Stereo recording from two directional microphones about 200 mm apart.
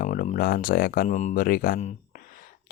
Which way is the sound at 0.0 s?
40° left (ahead or behind).